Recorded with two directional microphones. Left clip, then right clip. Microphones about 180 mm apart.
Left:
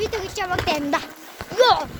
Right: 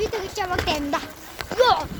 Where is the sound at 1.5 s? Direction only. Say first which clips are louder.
Left 2 dB; 40° left (ahead or behind).